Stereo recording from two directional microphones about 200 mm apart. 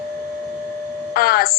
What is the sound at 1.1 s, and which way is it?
Speech, 45° left (ahead or behind).